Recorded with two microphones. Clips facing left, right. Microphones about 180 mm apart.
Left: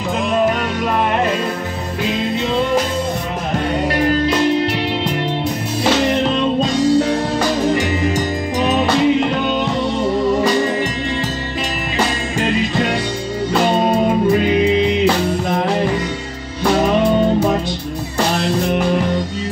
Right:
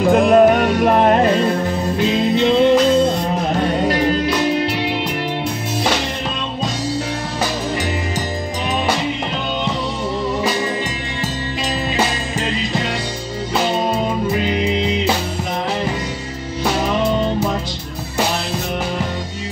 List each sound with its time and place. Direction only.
0.1 s music: 55° right (ahead or behind); by 1.5 s 35° right (ahead or behind)